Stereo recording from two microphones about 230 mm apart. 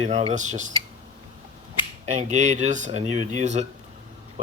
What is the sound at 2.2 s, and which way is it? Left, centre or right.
Speech, right.